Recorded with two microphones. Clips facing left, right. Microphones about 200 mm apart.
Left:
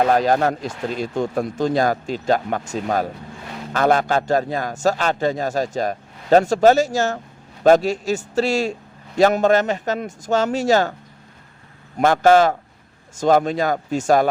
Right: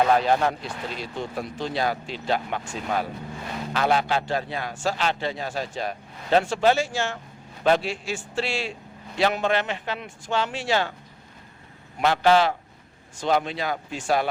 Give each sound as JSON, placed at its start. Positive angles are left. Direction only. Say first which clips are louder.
{"t": 0.1, "sound": "a man's voice", "louder": "left 4 dB", "side_deg": 45}
{"t": 11.9, "sound": "a man's voice", "louder": "left 5 dB", "side_deg": 45}